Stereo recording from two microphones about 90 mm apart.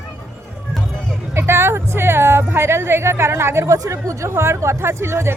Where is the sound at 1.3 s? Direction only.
30° right (ahead or behind).